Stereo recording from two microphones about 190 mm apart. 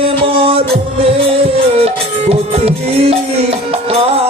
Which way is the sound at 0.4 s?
30° right (ahead or behind).